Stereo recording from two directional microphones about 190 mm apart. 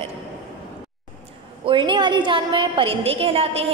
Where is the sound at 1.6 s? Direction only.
25° right (ahead or behind).